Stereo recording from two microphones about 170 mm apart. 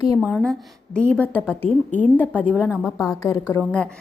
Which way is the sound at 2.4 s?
5° right (ahead or behind).